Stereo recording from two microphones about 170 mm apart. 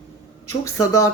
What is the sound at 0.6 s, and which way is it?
Speech, 20° left (ahead or behind).